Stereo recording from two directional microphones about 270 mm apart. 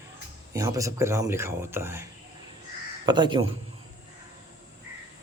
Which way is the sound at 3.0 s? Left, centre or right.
Centre.